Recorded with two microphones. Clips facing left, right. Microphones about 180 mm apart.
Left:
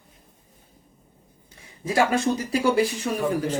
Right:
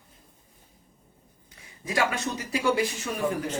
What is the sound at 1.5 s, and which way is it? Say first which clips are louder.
Speech: left 6 dB; 30° left (ahead or behind).